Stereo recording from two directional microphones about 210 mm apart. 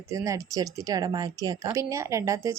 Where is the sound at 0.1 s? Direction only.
15° right (ahead or behind).